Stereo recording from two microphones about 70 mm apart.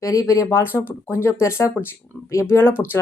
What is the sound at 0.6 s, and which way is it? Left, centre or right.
Speech, left.